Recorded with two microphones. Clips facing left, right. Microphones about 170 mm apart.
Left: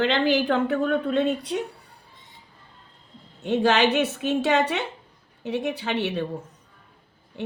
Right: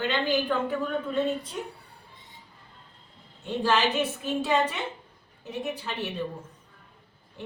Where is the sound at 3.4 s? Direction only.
75° left (ahead or behind).